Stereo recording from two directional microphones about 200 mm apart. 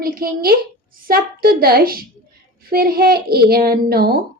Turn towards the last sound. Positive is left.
turn(degrees=-50)  # may be behind; listen again after turning